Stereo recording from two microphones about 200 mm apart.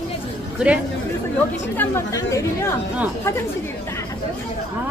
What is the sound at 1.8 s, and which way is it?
Speech, 15° left (ahead or behind).